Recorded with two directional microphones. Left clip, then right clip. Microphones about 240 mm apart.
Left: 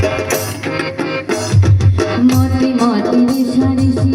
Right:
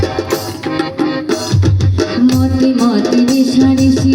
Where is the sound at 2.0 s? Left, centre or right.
Right.